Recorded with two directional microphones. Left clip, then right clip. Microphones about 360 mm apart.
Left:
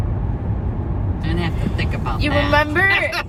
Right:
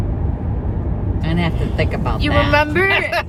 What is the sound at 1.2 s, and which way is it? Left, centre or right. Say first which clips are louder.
Vehicle: right 3 dB; centre.